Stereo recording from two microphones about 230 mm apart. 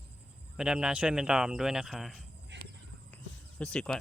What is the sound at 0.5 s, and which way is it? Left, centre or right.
Speech, centre.